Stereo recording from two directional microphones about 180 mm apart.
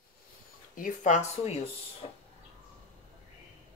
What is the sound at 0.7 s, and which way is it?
Speech, 45° left (ahead or behind).